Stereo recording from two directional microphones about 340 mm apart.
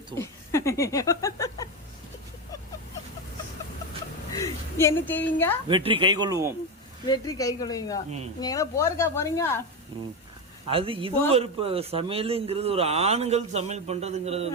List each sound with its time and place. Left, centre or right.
0.2 s speech: centre
4.3 s a sound: centre
5.6 s a man's voice: centre
7.1 s a woman's voice: centre
10.7 s a man's voice: centre